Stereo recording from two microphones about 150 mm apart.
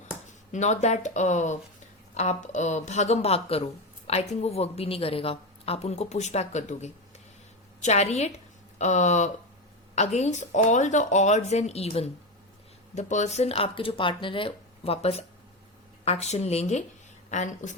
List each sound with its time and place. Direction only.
0.5 s speech: 50° left (ahead or behind)